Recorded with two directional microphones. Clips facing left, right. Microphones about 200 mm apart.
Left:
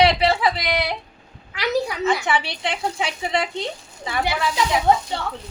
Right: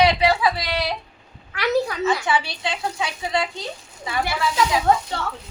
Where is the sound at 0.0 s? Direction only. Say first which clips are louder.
Even; 25° left (ahead or behind).